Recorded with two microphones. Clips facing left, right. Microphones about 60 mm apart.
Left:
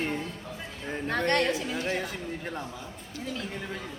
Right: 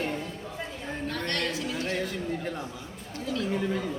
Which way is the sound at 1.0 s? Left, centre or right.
Left.